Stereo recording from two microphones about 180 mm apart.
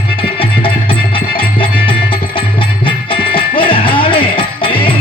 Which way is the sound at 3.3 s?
30° left (ahead or behind).